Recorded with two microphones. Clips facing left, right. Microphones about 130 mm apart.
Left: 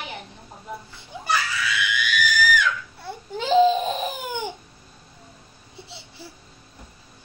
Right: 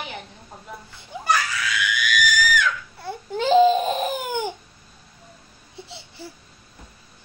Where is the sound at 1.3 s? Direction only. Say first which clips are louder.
Even; centre (ahead or behind).